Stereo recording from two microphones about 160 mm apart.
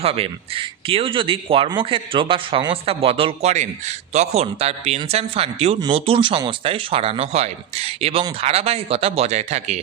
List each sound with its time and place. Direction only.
0.0 s speech: 35° right (ahead or behind)